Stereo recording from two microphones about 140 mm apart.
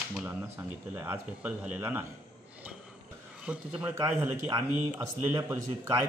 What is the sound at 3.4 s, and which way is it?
A man's voice, 10° right (ahead or behind).